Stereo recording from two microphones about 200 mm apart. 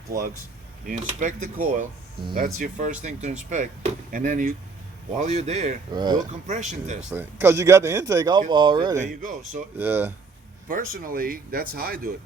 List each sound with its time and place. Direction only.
0.9 s speech: 40° right (ahead or behind)
5.9 s speech: 20° right (ahead or behind)
6.5 s speech: 35° right (ahead or behind)
7.1 s speech: 10° right (ahead or behind)
9.0 s speech: 35° right (ahead or behind)
9.7 s speech: 10° right (ahead or behind)
10.7 s speech: 45° right (ahead or behind)